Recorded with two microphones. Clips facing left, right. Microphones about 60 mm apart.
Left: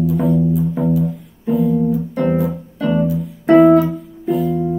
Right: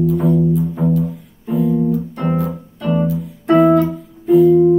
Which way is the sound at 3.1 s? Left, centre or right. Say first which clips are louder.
Left 1 dB; centre.